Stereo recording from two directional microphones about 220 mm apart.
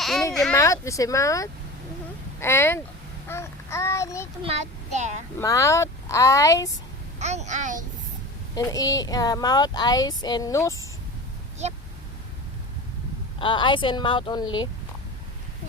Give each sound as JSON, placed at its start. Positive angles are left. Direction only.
{"t": 0.5, "sound": "a child's voice", "side_deg": 15}
{"t": 4.4, "sound": "speech", "side_deg": -30}
{"t": 5.4, "sound": "speech", "side_deg": 15}
{"t": 7.2, "sound": "speech", "side_deg": -30}
{"t": 8.5, "sound": "speech", "side_deg": 15}
{"t": 13.4, "sound": "a woman's voice", "side_deg": 20}